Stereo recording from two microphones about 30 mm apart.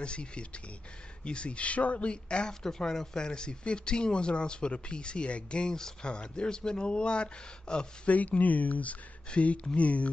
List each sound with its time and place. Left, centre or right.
0.0 s speech: left
2.0 s speech: left
2.9 s speech: centre; by 5.7 s left
5.7 s speech: centre
6.0 s speech: left
8.1 s speech: left
9.3 s speech: left